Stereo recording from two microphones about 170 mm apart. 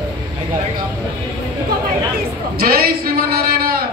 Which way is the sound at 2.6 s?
60° right (ahead or behind).